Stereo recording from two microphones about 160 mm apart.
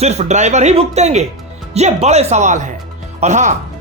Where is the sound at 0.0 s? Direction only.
45° right (ahead or behind).